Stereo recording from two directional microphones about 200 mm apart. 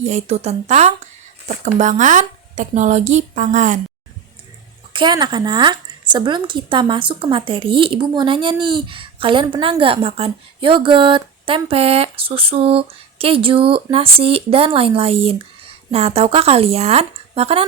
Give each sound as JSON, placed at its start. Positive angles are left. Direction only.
{"t": 0.0, "sound": "speech", "side_deg": -35}
{"t": 4.9, "sound": "speech", "side_deg": -20}